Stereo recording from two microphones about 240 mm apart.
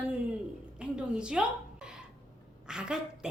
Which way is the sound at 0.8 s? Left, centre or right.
Centre.